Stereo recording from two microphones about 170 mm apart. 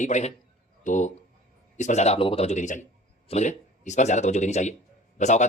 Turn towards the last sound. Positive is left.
turn(degrees=45)  # may be behind; listen again after turning